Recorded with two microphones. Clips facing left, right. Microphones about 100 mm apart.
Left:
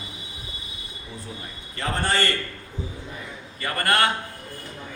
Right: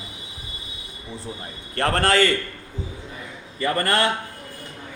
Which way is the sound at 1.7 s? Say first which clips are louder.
Right 6 dB; 80° right.